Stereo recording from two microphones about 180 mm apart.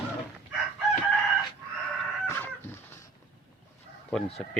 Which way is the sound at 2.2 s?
10° left (ahead or behind).